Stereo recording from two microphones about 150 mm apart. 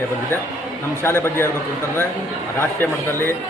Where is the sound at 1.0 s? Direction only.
15° left (ahead or behind).